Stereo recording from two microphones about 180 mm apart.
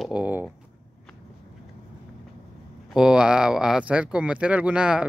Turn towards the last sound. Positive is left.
turn(degrees=-5)  # may be behind; listen again after turning